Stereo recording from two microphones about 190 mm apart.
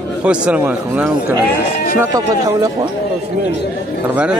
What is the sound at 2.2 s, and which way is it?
Speech, 20° right (ahead or behind).